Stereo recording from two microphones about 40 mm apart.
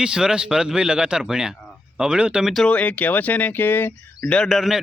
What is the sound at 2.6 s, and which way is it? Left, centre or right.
Speech, left.